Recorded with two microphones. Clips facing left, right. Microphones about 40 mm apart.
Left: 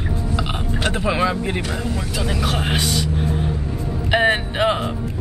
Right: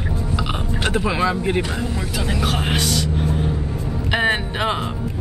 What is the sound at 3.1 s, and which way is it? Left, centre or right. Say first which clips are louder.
Vehicle: right 1 dB; centre.